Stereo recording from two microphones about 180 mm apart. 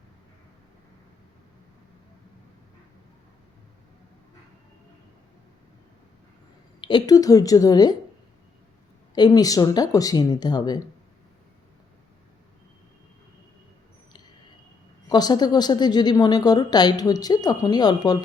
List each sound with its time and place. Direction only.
6.8 s a woman's voice: 20° left (ahead or behind)
9.1 s a woman's voice: 20° left (ahead or behind)
15.1 s a woman's voice: 25° left (ahead or behind)